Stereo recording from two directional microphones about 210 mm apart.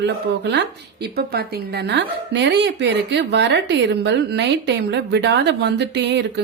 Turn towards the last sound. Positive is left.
turn(degrees=-55)  # may be behind; listen again after turning